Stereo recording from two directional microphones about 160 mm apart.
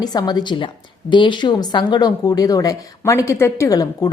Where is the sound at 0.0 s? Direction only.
25° left (ahead or behind).